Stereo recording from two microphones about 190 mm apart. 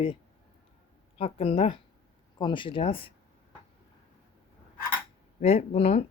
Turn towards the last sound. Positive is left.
turn(degrees=30)  # may be behind; listen again after turning